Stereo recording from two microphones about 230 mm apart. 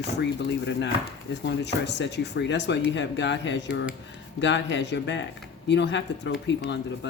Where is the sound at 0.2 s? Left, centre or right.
Left.